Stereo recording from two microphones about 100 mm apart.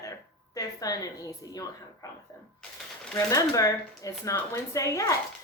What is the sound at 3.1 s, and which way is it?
A woman's voice, 35° left (ahead or behind).